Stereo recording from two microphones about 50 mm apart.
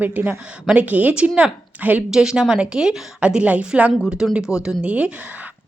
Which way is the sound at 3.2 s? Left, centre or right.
Right.